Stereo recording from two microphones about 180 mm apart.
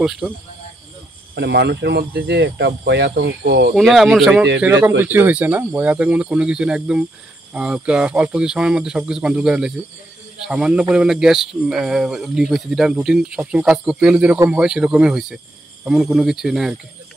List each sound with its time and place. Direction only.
0.0 s speech: 5° right (ahead or behind)
1.3 s speech: 70° right (ahead or behind)
3.7 s speech: centre (ahead or behind)